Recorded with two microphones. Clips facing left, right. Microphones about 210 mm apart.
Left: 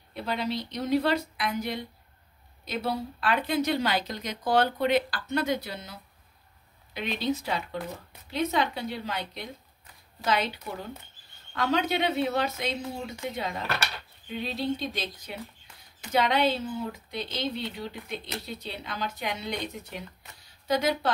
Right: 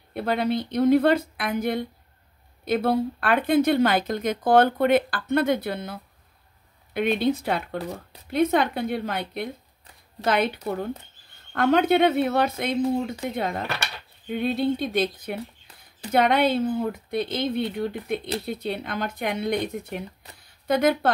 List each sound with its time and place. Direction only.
0.1 s speech: 55° right (ahead or behind)